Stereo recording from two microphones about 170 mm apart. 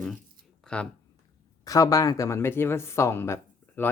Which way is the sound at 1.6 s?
20° left (ahead or behind).